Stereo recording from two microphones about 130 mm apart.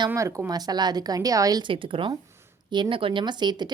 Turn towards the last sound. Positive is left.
turn(degrees=-35)  # may be behind; listen again after turning